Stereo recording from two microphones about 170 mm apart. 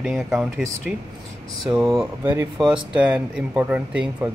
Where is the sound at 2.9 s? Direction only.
5° right (ahead or behind).